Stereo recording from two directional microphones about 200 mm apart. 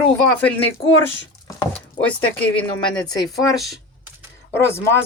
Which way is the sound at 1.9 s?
5° left (ahead or behind).